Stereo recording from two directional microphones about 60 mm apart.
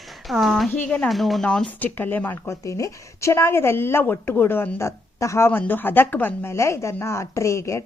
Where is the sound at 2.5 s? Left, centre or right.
Left.